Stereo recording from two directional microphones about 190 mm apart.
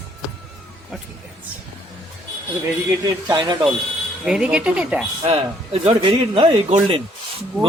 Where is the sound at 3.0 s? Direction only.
20° right (ahead or behind).